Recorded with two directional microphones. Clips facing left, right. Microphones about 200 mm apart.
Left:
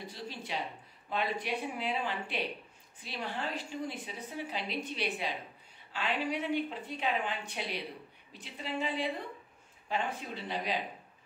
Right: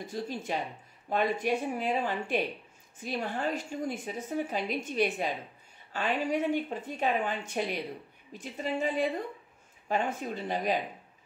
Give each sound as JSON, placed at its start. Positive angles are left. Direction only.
{"t": 0.0, "sound": "a woman's voice", "side_deg": -45}